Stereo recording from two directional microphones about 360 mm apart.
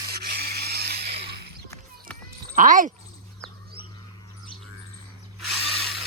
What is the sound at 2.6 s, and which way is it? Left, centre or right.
Speech, right.